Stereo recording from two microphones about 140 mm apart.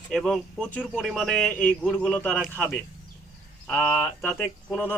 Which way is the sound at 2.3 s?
5° right (ahead or behind).